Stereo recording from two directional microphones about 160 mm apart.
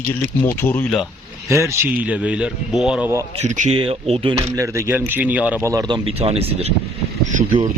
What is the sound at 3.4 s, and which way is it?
Speech, 45° right (ahead or behind).